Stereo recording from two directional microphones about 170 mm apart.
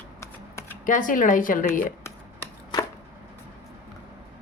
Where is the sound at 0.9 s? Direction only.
50° left (ahead or behind).